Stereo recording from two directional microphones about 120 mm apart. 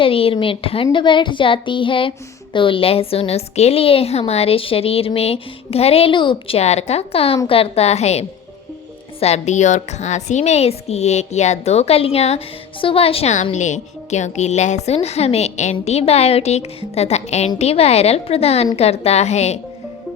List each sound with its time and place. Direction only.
0.0 s speech: 50° left (ahead or behind)
6.6 s a woman's voice: 65° left (ahead or behind)
9.2 s a woman's voice: 70° left (ahead or behind); by 13.3 s 55° left (ahead or behind)
13.3 s a woman's voice: 85° left; by 19.5 s 65° left (ahead or behind)